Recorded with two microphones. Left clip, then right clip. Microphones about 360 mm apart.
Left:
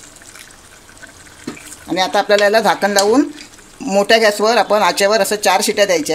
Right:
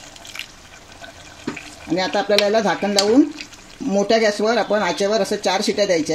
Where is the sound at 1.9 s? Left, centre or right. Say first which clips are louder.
Left 5 dB; left.